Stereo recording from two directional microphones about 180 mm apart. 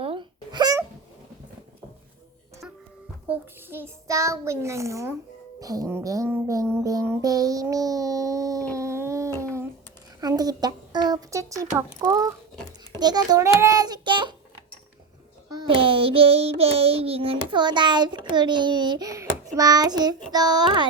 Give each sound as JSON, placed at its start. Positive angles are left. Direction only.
{"t": 0.0, "sound": "babbling", "side_deg": -30}
{"t": 3.2, "sound": "a child's voice", "side_deg": -10}
{"t": 6.8, "sound": "child singing", "side_deg": -15}
{"t": 8.7, "sound": "a sound", "side_deg": -15}
{"t": 12.0, "sound": "a child's voice", "side_deg": -20}
{"t": 15.4, "sound": "a child's voice", "side_deg": -25}